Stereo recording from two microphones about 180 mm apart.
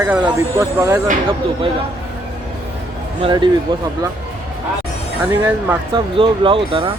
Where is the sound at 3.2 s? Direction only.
25° right (ahead or behind).